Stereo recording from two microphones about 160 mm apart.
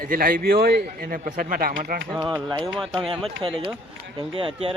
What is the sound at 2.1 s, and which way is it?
Speech, centre (ahead or behind).